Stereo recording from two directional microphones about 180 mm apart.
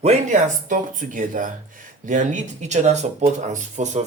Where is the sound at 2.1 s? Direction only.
45° right (ahead or behind).